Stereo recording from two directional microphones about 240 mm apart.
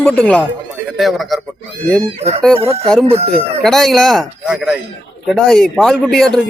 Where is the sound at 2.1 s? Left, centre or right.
Right.